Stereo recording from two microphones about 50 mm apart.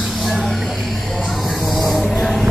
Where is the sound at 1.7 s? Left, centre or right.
Centre.